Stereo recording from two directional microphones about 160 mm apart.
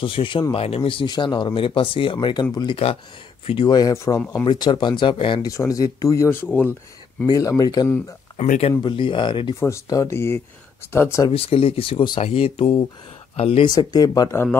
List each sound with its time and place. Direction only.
0.0 s a man's voice: 35° left (ahead or behind)
5.5 s speech: 20° left (ahead or behind)
8.4 s speech: 40° left (ahead or behind)
8.8 s a man's voice: 30° left (ahead or behind)
9.6 s speech: 20° left (ahead or behind)
11.2 s a man's voice: 35° left (ahead or behind)
13.7 s speech: 25° left (ahead or behind)